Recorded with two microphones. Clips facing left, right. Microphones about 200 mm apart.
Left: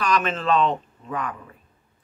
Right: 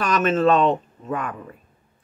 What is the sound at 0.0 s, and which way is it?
Speech, 45° right (ahead or behind).